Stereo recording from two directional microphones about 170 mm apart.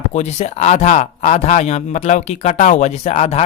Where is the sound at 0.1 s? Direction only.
40° left (ahead or behind).